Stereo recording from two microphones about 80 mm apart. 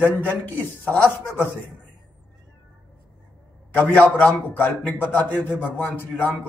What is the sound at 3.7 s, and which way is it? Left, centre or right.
A man's voice, left.